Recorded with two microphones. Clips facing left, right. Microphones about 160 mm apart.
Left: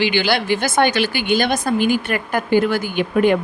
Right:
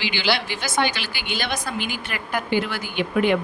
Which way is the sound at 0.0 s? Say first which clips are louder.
Left 6 dB; 50° left (ahead or behind).